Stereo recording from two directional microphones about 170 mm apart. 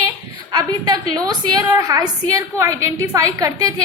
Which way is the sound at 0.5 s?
25° right (ahead or behind).